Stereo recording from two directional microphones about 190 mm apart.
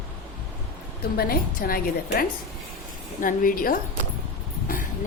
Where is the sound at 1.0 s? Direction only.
50° left (ahead or behind).